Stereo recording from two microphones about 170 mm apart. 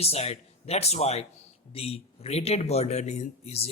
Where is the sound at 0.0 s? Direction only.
35° left (ahead or behind).